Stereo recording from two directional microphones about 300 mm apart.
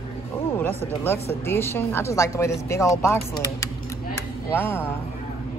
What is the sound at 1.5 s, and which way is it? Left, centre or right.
A woman's voice, centre.